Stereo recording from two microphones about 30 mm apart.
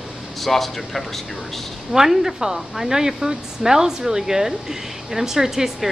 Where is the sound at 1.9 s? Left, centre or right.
Centre.